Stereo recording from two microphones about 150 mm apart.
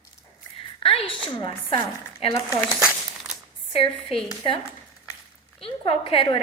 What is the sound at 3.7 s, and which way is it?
Speech, 40° left (ahead or behind).